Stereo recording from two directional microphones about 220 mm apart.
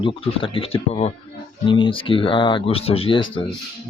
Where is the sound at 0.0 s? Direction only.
25° left (ahead or behind).